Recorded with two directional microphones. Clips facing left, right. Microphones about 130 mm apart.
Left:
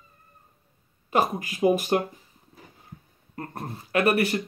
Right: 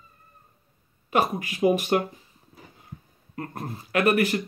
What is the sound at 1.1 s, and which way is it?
Speech, 35° left (ahead or behind).